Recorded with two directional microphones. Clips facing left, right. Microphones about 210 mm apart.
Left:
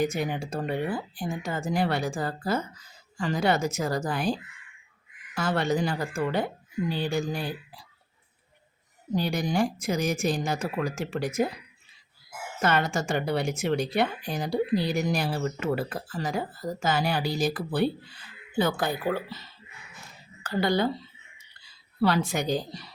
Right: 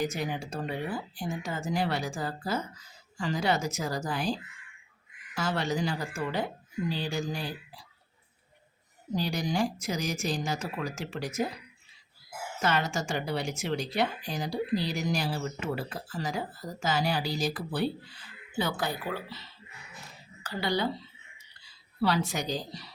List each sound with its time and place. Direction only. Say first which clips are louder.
0.0 s speech: left 4 dB; 55° left (ahead or behind)
9.1 s speech: left 3 dB; 55° left (ahead or behind)
12.6 s speech: left 4 dB; 55° left (ahead or behind)
20.4 s speech: left 5 dB; 50° left (ahead or behind)
22.0 s speech: left 4 dB; 50° left (ahead or behind)